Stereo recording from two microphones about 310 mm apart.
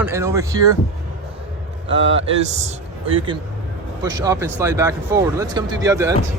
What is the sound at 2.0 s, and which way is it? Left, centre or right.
Speech, right.